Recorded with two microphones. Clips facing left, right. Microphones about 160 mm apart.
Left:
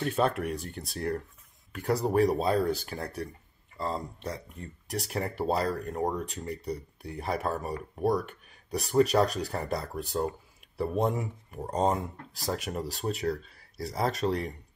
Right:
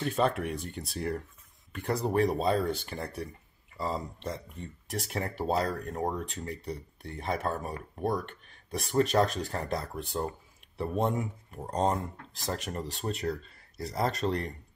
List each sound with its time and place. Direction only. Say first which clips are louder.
0.0 s speech: left 1 dB; centre (ahead or behind)